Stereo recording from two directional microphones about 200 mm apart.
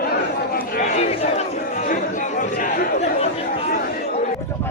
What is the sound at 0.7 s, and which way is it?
Chatter, 35° left (ahead or behind).